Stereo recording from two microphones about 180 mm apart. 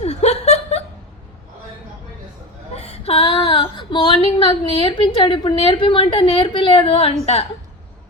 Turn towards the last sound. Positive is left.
turn(degrees=35)  # may be behind; listen again after turning